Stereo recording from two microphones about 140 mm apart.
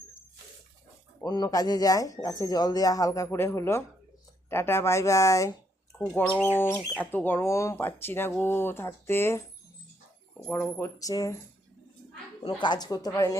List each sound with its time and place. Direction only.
1.2 s speech: 25° left (ahead or behind)
10.4 s speech: 15° left (ahead or behind)
12.5 s speech: 35° left (ahead or behind)